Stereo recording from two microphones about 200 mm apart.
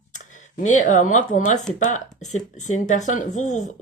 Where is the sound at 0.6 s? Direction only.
35° left (ahead or behind).